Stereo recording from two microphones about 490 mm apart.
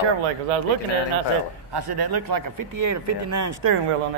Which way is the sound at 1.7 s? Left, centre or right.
Right.